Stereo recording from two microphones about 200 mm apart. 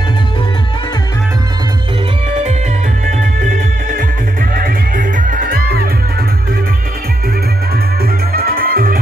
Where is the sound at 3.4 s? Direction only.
40° right (ahead or behind).